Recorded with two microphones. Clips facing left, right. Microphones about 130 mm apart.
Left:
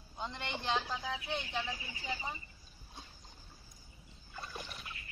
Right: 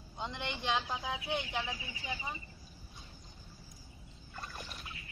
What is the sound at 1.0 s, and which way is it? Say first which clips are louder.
Speech: right 2 dB; 15° right (ahead or behind).